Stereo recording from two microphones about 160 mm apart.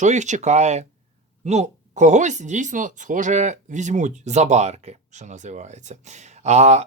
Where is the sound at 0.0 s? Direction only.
50° right (ahead or behind).